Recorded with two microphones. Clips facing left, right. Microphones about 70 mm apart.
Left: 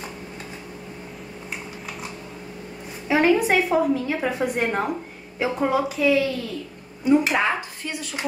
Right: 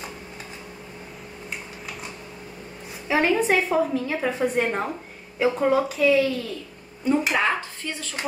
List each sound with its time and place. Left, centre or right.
3.1 s a woman's voice: centre